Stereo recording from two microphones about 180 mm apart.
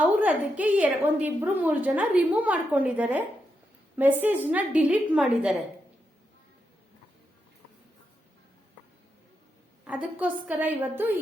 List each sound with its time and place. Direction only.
0.2 s a woman's voice: 10° right (ahead or behind)
9.8 s a woman's voice: 5° right (ahead or behind)